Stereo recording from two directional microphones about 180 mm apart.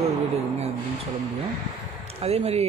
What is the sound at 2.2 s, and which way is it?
Speech, 35° right (ahead or behind).